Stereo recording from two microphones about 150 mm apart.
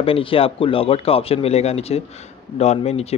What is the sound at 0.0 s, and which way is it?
Speech, 35° left (ahead or behind).